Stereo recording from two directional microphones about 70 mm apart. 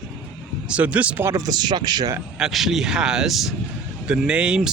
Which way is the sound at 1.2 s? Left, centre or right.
Right.